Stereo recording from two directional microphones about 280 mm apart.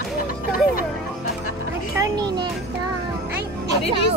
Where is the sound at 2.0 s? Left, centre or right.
Centre.